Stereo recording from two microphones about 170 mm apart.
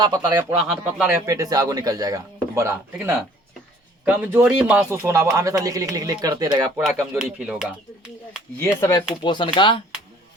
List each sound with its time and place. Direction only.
0.0 s speech: 20° right (ahead or behind)
0.6 s speech: 5° right (ahead or behind)
1.3 s speech: 20° right (ahead or behind)
7.1 s speech: 10° right (ahead or behind)
8.5 s speech: 10° left (ahead or behind)
9.2 s speech: 25° left (ahead or behind)